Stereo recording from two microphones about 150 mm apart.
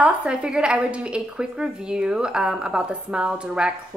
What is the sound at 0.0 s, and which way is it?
Speech, 5° right (ahead or behind).